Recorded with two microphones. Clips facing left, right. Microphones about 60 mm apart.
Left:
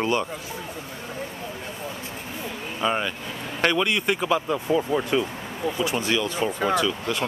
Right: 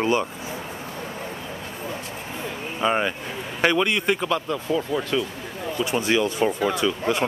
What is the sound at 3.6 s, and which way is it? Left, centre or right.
Speech, centre.